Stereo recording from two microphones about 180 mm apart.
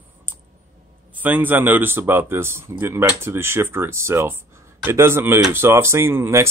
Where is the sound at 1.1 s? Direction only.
10° right (ahead or behind).